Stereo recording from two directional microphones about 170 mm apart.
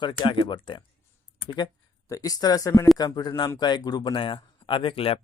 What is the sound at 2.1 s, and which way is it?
Speech, 20° left (ahead or behind).